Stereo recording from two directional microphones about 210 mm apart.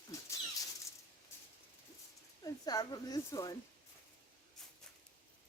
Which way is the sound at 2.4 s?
20° left (ahead or behind).